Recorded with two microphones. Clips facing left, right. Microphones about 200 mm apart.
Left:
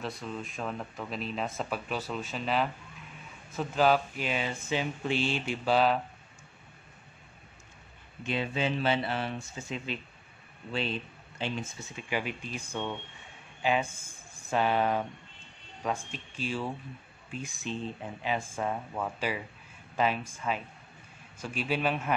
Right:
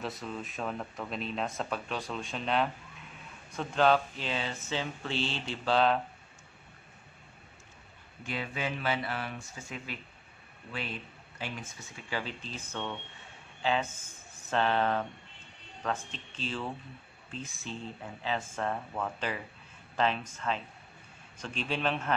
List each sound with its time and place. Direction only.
0.0 s speech: centre (ahead or behind)
8.2 s speech: 25° left (ahead or behind)